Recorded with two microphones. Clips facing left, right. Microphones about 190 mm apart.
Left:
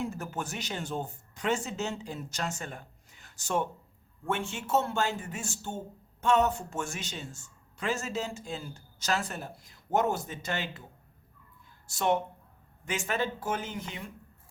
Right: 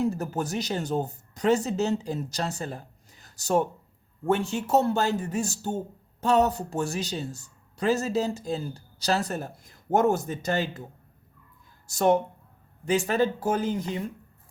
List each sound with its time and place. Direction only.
0.0 s speech: 40° right (ahead or behind)
11.9 s speech: 40° right (ahead or behind)